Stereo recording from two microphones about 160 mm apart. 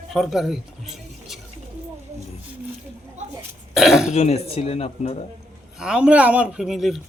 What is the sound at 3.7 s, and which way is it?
Speech, centre (ahead or behind).